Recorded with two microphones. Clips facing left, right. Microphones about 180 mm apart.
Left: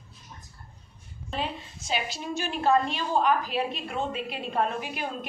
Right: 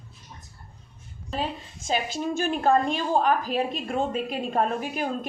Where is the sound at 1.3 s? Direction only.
45° right (ahead or behind).